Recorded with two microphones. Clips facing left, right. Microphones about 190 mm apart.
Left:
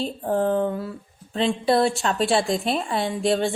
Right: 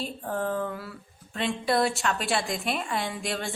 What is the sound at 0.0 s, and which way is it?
Speech, 30° left (ahead or behind).